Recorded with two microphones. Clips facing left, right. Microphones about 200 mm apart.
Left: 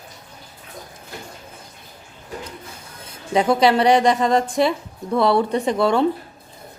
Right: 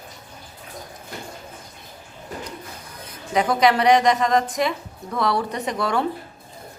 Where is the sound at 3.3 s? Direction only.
30° left (ahead or behind).